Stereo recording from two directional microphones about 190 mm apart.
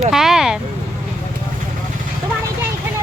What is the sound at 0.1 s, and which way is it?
Vehicle, centre (ahead or behind).